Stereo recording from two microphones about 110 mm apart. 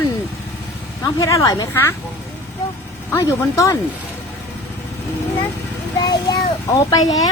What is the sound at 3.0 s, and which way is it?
Speech, 25° left (ahead or behind).